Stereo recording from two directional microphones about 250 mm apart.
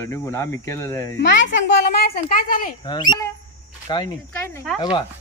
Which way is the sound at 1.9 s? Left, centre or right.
Left.